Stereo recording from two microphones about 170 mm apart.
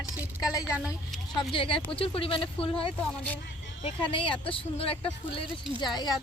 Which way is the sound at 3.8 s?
30° left (ahead or behind).